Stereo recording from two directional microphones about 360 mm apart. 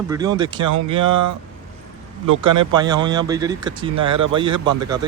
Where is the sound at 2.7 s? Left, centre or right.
Centre.